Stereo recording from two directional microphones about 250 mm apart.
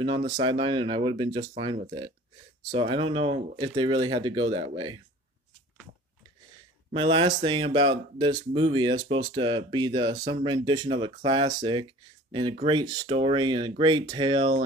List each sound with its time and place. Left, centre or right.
0.0 s speech: centre
6.9 s speech: centre